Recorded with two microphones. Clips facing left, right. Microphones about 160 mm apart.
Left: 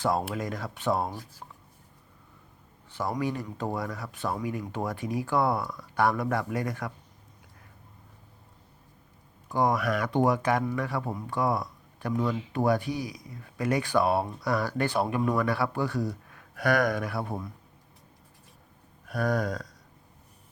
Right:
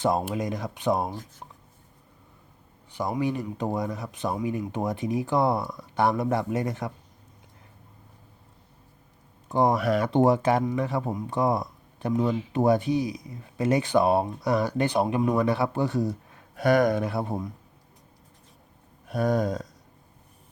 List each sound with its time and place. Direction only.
0.0 s speech: 20° right (ahead or behind)
2.9 s speech: 15° right (ahead or behind)
9.5 s speech: 25° right (ahead or behind)
19.0 s a sound: 25° right (ahead or behind)